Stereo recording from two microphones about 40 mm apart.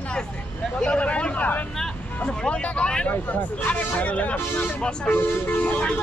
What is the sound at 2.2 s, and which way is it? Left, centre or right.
Speech, left.